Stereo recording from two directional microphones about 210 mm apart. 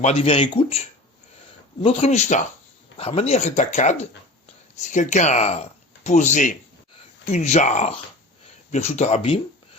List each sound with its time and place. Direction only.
0.0 s speech: 30° left (ahead or behind)
1.8 s speech: 30° left (ahead or behind)